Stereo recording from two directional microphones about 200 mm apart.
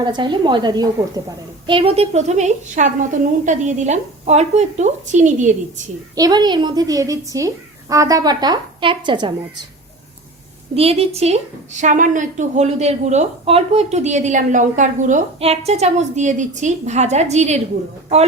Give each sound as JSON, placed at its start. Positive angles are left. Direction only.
{"t": 0.0, "sound": "a woman's voice", "side_deg": -20}
{"t": 6.1, "sound": "speech", "side_deg": -20}
{"t": 10.8, "sound": "a woman's voice", "side_deg": -30}